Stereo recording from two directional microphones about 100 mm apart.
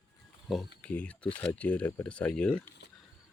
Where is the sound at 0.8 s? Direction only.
15° left (ahead or behind).